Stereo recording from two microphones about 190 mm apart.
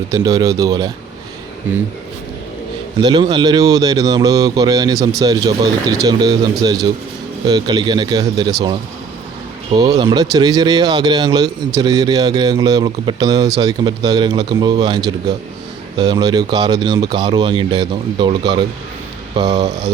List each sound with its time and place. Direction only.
0.1 s speech: 20° right (ahead or behind)
3.0 s speech: 25° right (ahead or behind)
9.7 s speech: 20° right (ahead or behind)